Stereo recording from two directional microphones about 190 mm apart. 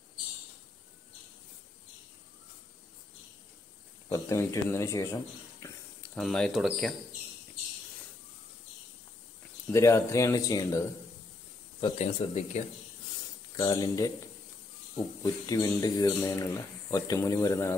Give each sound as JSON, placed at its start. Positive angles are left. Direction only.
{"t": 4.1, "sound": "speech", "side_deg": 15}
{"t": 6.1, "sound": "speech", "side_deg": 0}
{"t": 9.7, "sound": "speech", "side_deg": 15}
{"t": 12.0, "sound": "speech", "side_deg": 35}
{"t": 13.6, "sound": "speech", "side_deg": 20}